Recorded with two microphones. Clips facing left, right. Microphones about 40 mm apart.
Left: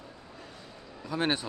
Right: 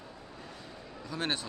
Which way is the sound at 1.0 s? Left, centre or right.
Centre.